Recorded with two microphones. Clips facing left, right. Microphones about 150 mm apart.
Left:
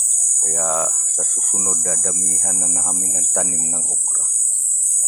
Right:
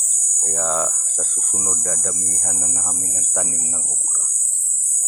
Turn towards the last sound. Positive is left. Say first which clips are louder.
# left 3 dB
turn(degrees=25)  # may be behind; listen again after turning